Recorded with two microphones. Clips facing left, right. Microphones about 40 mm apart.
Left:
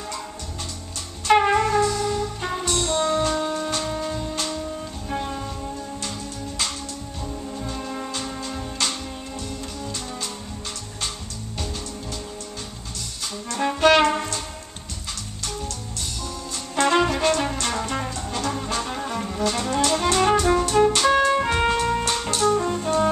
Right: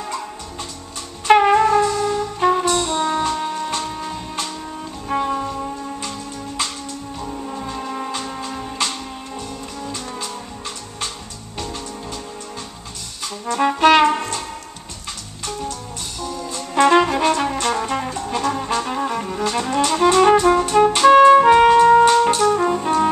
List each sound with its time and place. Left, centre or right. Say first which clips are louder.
1.2 s music: right 5 dB; centre
7.2 s music: right 3 dB; right
7.6 s music: right 4 dB; centre
13.5 s brass instrument: right 6 dB; right
13.7 s brass instrument: right 3 dB; centre
16.2 s jazz: right 5 dB; centre
17.2 s music: right 4 dB; centre
21.9 s music: right 12 dB; right